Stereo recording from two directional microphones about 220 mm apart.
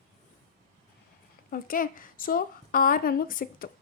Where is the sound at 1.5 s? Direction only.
40° left (ahead or behind).